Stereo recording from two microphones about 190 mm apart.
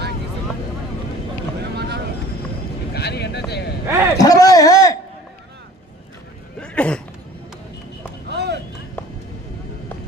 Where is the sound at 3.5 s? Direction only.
60° left (ahead or behind).